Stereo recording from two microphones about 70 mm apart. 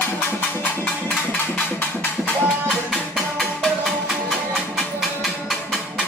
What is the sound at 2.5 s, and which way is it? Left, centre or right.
Music, centre.